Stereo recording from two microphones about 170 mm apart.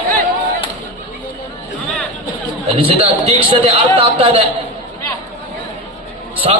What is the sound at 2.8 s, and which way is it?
A man's voice, 30° right (ahead or behind).